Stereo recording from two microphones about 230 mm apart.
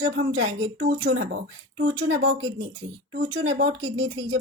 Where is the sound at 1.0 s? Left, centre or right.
Right.